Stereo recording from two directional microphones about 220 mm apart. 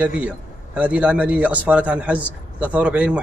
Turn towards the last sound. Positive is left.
turn(degrees=-5)  # may be behind; listen again after turning